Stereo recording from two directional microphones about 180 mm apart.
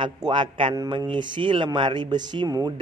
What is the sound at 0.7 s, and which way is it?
Speech, 20° right (ahead or behind).